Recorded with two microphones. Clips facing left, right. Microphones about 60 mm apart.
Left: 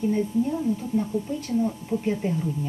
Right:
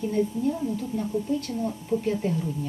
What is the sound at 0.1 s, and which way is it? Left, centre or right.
Speech, centre.